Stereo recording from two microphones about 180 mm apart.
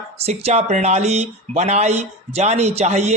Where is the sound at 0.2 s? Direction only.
35° right (ahead or behind).